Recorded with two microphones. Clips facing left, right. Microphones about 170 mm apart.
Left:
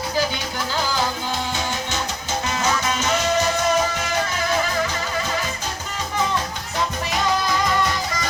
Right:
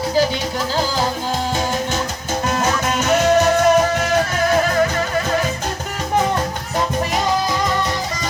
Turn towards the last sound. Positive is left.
turn(degrees=-50)  # may be behind; listen again after turning